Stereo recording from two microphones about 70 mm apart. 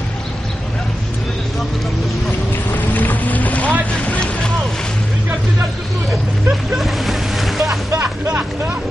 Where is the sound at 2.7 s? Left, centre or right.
Left.